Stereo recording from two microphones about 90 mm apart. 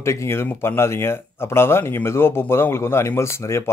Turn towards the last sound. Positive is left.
turn(degrees=30)  # may be behind; listen again after turning